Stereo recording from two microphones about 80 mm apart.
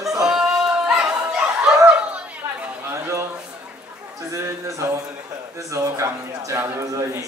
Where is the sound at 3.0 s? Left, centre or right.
Right.